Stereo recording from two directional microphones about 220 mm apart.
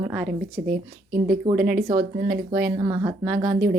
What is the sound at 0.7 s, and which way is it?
Speech, 40° right (ahead or behind).